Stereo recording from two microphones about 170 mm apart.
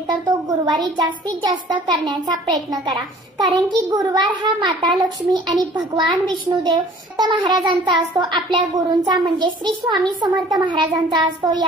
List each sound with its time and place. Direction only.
0.3 s a child's voice: 25° right (ahead or behind)